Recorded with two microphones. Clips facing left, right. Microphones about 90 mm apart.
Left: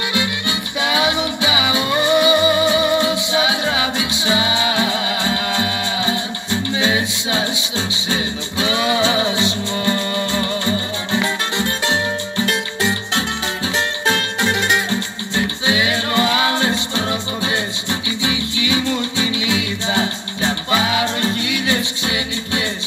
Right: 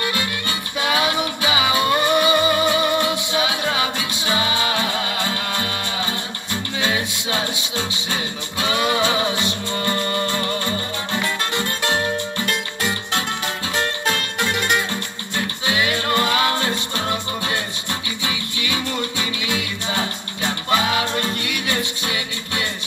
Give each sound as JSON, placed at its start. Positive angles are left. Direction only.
{"t": 0.2, "sound": "music", "side_deg": 10}
{"t": 1.5, "sound": "music", "side_deg": -45}
{"t": 1.9, "sound": "music", "side_deg": 10}
{"t": 3.0, "sound": "music", "side_deg": -55}
{"t": 4.3, "sound": "music", "side_deg": 15}
{"t": 7.5, "sound": "music", "side_deg": -55}
{"t": 9.0, "sound": "music", "side_deg": 20}
{"t": 14.9, "sound": "music", "side_deg": 20}
{"t": 16.1, "sound": "music", "side_deg": -50}
{"t": 16.3, "sound": "music", "side_deg": 15}
{"t": 19.9, "sound": "music", "side_deg": 20}